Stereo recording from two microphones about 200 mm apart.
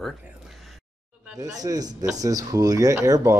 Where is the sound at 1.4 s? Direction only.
20° right (ahead or behind).